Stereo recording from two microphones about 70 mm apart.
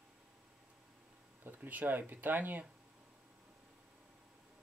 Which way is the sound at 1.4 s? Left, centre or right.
Right.